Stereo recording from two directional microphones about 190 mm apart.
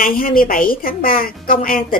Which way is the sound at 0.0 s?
50° left (ahead or behind).